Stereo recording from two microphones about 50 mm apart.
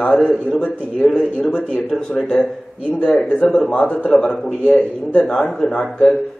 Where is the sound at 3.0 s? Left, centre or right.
Left.